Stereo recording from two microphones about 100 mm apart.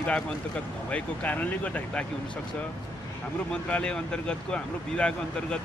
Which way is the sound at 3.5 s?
10° left (ahead or behind).